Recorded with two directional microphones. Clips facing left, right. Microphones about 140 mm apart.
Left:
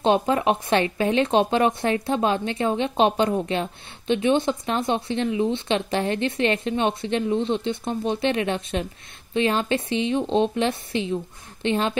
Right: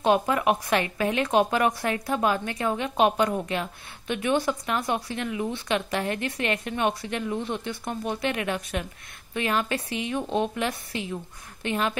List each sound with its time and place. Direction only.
0.0 s speech: 25° left (ahead or behind)